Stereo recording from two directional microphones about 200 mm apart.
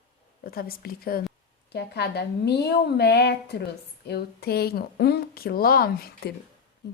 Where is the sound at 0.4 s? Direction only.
45° left (ahead or behind).